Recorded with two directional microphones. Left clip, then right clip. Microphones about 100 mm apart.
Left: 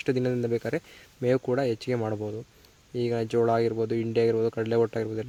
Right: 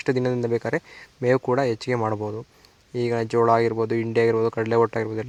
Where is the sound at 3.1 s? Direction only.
5° left (ahead or behind).